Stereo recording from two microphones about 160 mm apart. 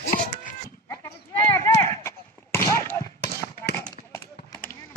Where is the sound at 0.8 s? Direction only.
15° left (ahead or behind).